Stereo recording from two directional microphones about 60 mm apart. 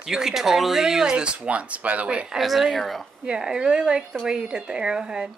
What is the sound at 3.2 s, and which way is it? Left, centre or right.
Speech, centre.